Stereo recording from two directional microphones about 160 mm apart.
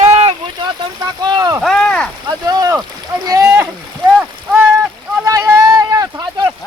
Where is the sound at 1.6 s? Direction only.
5° left (ahead or behind).